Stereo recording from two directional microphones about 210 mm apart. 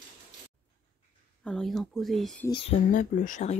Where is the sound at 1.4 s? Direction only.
Centre (ahead or behind).